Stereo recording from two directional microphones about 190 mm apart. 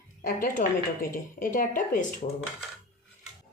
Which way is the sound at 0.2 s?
50° left (ahead or behind).